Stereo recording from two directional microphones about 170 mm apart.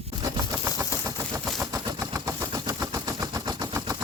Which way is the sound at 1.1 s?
20° right (ahead or behind).